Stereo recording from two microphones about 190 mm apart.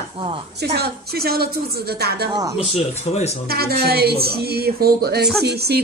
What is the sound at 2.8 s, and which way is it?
Speech, 35° left (ahead or behind).